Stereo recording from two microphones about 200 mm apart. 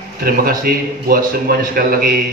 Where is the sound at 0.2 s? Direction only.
45° right (ahead or behind).